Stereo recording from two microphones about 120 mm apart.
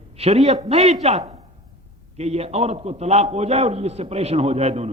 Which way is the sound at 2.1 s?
60° right (ahead or behind).